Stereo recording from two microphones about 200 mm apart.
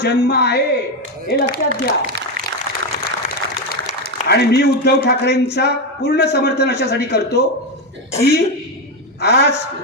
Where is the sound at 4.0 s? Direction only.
55° left (ahead or behind).